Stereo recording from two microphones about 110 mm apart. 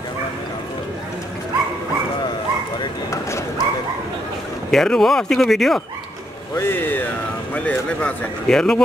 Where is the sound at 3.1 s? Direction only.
25° left (ahead or behind).